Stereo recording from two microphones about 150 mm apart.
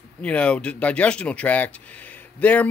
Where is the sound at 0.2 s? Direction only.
10° left (ahead or behind).